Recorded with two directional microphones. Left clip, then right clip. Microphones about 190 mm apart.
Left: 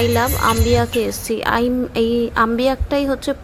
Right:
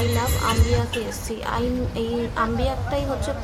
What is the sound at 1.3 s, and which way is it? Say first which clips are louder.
A woman's voice: left 7 dB; 30° left (ahead or behind).